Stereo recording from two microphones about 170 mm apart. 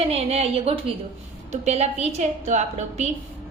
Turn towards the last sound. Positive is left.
turn(degrees=-45)  # may be behind; listen again after turning